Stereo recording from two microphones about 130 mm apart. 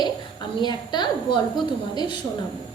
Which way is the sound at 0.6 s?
35° left (ahead or behind).